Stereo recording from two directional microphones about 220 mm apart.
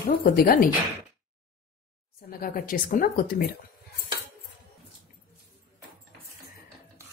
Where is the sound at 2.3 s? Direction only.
40° left (ahead or behind).